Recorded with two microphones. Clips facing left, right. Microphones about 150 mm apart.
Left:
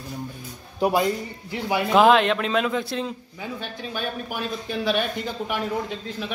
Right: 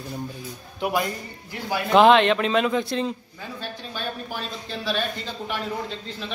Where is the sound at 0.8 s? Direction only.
40° left (ahead or behind).